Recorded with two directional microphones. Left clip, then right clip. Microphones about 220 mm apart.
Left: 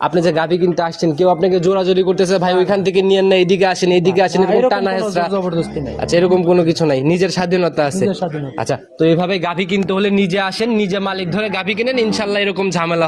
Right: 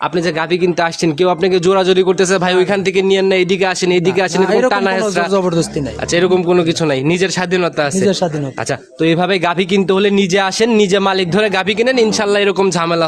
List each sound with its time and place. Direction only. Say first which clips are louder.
0.2 s speech: left 1 dB; centre (ahead or behind)
0.6 s speech: right 2 dB; 15° right (ahead or behind)
4.4 s a man's voice: right 1 dB; 35° right (ahead or behind)
4.7 s speech: right 2 dB; 10° right (ahead or behind)
9.0 s speech: left 1 dB; 10° right (ahead or behind)
9.3 s a man's voice: right 4 dB; 30° right (ahead or behind)
10.7 s a man's voice: right 6 dB; 40° right (ahead or behind)